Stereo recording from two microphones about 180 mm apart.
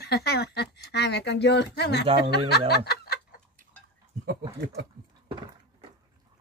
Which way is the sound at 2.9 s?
60° left (ahead or behind).